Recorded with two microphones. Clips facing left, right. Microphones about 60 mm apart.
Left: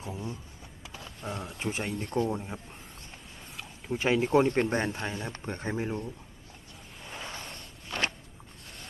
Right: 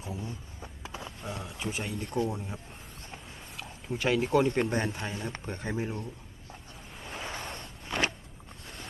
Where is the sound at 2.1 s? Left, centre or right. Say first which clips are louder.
Left 2 dB; left.